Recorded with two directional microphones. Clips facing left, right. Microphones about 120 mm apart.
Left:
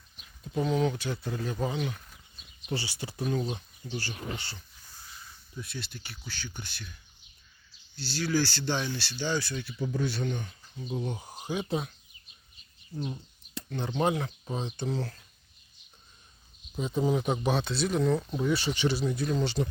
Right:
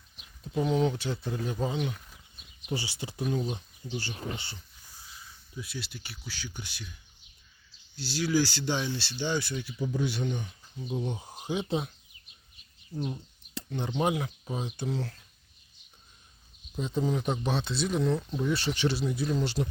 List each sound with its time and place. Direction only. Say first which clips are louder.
0.2 s speech: right 1 dB; 20° right (ahead or behind)
5.5 s speech: right 1 dB; 5° right (ahead or behind)
7.9 s speech: right 2 dB; 15° right (ahead or behind)
13.7 s speech: left 1 dB; 15° right (ahead or behind); by 15.2 s centre (ahead or behind)
16.8 s speech: left 2 dB; 5° left (ahead or behind)